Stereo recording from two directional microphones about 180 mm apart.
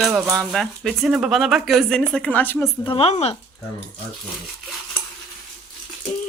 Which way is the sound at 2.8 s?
30° left (ahead or behind).